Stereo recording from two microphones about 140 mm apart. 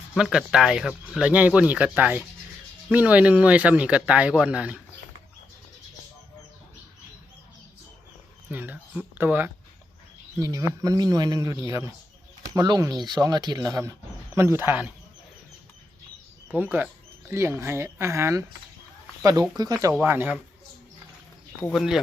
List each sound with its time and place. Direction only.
0.1 s speech: 5° right (ahead or behind)
8.4 s speech: 10° right (ahead or behind)
16.7 s speech: 15° right (ahead or behind)
19.9 s speech: 15° right (ahead or behind)
21.7 s speech: centre (ahead or behind)